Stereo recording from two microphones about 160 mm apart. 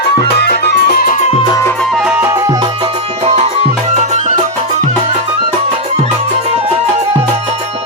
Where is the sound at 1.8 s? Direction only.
Centre (ahead or behind); by 2.6 s 15° right (ahead or behind).